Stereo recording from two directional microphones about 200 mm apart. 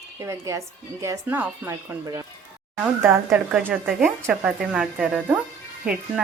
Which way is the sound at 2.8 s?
5° right (ahead or behind).